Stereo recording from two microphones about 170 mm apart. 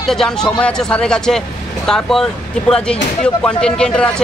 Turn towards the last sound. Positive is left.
turn(degrees=5)  # may be behind; listen again after turning